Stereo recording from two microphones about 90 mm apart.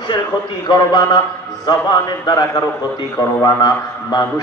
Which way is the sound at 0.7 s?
45° left (ahead or behind).